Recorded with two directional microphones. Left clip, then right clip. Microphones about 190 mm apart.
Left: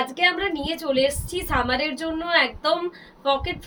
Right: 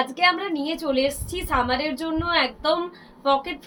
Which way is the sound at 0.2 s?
25° left (ahead or behind).